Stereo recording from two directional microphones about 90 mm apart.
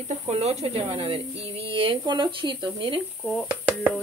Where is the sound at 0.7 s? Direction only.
90° right; by 3.0 s 65° right (ahead or behind).